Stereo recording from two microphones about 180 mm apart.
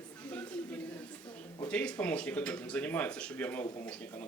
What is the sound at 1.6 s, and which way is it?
Speech, 5° left (ahead or behind).